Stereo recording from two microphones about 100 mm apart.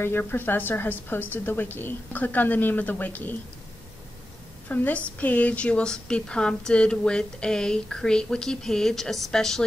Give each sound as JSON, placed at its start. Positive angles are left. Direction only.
{"t": 0.0, "sound": "a woman's voice", "side_deg": 20}
{"t": 4.6, "sound": "a woman's voice", "side_deg": 15}